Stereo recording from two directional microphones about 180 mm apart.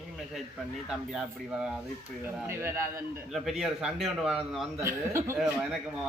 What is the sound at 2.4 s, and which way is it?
Speech, 15° right (ahead or behind).